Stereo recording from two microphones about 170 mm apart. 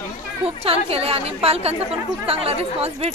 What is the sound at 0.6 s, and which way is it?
Speech, 35° right (ahead or behind).